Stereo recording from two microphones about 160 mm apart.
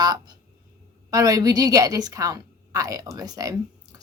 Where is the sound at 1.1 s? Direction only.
20° right (ahead or behind).